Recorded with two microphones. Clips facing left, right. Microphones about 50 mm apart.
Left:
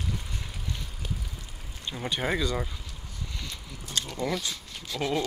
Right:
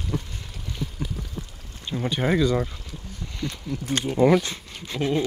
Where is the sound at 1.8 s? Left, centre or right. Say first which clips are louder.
Right 5 dB; centre.